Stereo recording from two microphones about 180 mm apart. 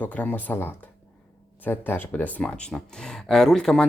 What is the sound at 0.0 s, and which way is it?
Speech, 10° left (ahead or behind).